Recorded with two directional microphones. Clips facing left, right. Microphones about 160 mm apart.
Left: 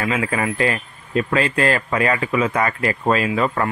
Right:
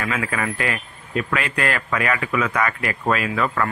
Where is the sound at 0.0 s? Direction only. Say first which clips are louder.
Left 3 dB; 25° left (ahead or behind).